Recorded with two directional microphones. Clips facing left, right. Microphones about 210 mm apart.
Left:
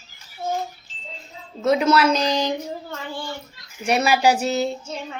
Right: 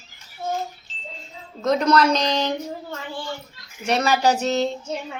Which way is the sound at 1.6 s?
5° left (ahead or behind).